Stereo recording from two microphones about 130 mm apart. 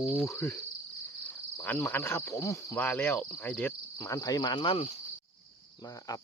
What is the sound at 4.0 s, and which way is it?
Cricket, 25° left (ahead or behind).